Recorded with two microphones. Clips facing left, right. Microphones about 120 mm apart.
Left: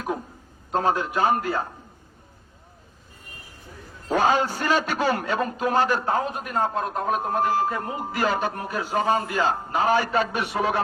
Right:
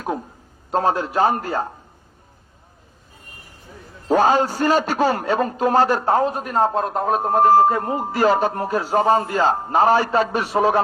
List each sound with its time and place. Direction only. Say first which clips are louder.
0.7 s a man's voice: right 3 dB; 40° right (ahead or behind)
4.1 s a man's voice: right 5 dB; 40° right (ahead or behind)